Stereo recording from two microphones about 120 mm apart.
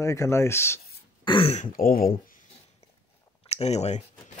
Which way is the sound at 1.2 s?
45° left (ahead or behind).